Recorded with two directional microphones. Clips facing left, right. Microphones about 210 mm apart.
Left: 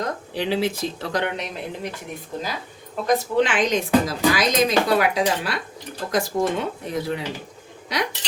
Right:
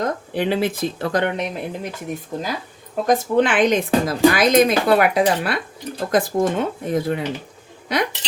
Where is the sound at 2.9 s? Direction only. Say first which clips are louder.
Right 3 dB; 50° right (ahead or behind).